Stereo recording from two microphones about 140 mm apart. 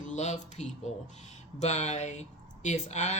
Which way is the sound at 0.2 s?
55° left (ahead or behind).